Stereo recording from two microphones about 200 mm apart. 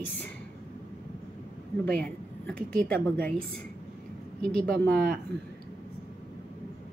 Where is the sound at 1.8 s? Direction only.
5° left (ahead or behind).